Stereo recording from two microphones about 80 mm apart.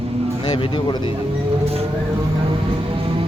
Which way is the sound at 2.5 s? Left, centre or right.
Right.